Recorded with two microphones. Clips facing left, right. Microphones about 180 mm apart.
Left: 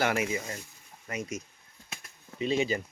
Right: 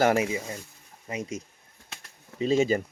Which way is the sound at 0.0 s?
40° right (ahead or behind).